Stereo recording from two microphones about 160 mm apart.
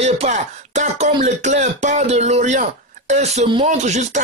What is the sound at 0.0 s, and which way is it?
Speech, 45° right (ahead or behind).